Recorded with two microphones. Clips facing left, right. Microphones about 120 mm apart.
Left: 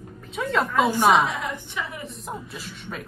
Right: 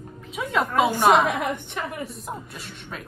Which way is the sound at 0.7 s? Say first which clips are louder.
Right 1 dB; 55° right (ahead or behind).